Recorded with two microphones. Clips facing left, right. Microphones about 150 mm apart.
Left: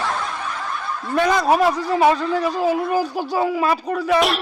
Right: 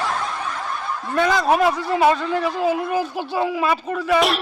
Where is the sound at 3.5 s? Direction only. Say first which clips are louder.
Left 1 dB; centre (ahead or behind).